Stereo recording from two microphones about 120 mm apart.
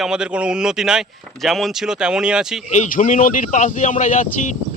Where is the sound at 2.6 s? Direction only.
85° left.